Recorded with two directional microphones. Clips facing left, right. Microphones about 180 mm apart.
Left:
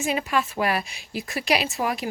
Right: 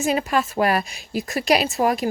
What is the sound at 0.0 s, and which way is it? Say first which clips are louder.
A woman's voice: right 4 dB; 40° right (ahead or behind).